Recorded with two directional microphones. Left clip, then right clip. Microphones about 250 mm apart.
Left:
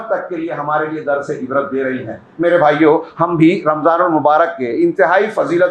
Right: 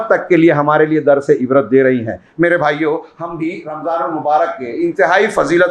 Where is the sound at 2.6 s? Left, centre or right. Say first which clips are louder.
Left 4 dB; centre.